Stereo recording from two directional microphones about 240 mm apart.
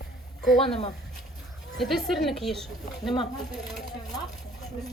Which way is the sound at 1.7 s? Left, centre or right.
Centre.